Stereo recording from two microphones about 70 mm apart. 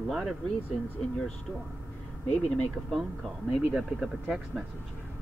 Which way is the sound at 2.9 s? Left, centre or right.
Centre.